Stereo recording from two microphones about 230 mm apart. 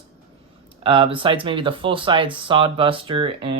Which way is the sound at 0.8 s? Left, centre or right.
Right.